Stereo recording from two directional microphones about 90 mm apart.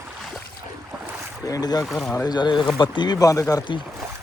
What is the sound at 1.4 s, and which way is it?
Speech, 45° left (ahead or behind).